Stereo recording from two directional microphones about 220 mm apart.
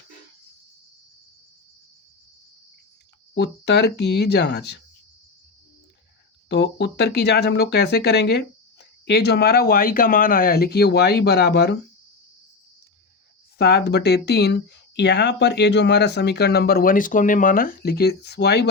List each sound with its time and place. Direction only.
3.3 s speech: 50° left (ahead or behind)
6.5 s speech: 50° left (ahead or behind)
13.6 s speech: 50° left (ahead or behind)